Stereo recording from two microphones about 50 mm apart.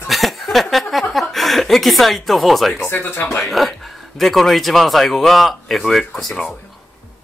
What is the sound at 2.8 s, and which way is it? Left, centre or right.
Speech, left.